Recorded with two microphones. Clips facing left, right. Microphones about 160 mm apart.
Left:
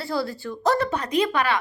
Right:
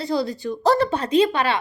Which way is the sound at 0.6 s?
30° right (ahead or behind).